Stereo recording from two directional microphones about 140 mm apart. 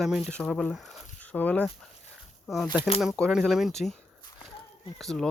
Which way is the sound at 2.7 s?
35° left (ahead or behind).